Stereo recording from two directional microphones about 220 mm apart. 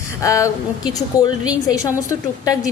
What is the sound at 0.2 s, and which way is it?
Speech, 15° left (ahead or behind).